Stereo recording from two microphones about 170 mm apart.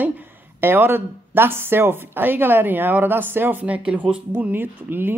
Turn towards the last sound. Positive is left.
turn(degrees=-10)  # may be behind; listen again after turning